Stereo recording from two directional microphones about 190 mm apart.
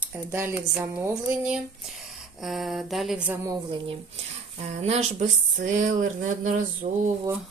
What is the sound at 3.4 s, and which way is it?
Speech, 25° right (ahead or behind).